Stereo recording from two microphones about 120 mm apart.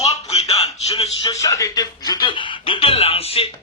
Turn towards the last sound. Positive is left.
turn(degrees=55)  # may be behind; listen again after turning